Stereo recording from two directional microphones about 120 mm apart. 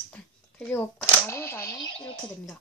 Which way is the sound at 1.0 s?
20° left (ahead or behind).